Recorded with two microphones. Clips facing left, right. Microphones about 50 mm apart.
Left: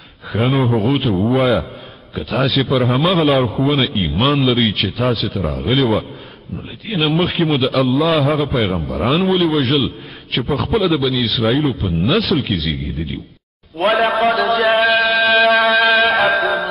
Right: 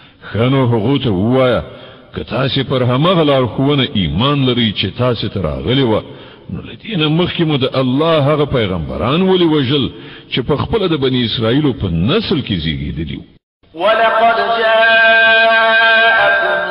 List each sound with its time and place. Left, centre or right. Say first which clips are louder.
0.3 s a man's voice: right 3 dB; centre
14.1 s a sound: right 4 dB; centre
14.9 s music: right 6 dB; right
15.2 s music: right 3 dB; centre